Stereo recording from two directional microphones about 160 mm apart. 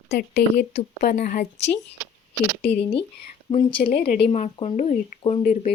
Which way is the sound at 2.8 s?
35° left (ahead or behind).